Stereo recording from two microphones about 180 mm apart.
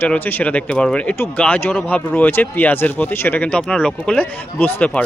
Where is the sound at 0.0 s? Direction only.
10° left (ahead or behind).